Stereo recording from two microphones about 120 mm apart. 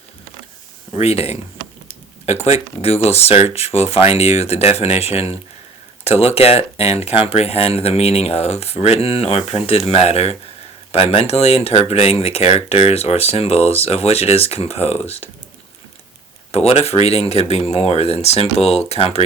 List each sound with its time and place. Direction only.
0.9 s speech: 60° left (ahead or behind)
16.5 s speech: 55° left (ahead or behind)